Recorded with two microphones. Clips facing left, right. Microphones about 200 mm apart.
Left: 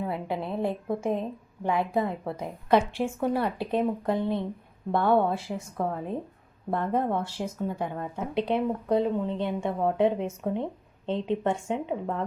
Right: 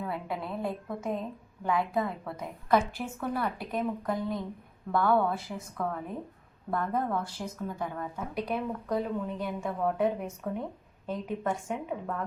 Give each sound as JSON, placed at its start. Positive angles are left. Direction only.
{"t": 0.0, "sound": "speech", "side_deg": 25}